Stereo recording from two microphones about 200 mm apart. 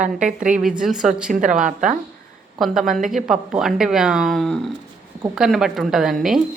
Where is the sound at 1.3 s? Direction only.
40° right (ahead or behind).